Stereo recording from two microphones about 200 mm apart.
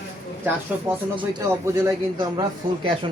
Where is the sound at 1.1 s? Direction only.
20° right (ahead or behind).